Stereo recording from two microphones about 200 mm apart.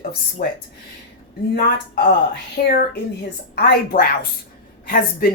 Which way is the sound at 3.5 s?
50° left (ahead or behind).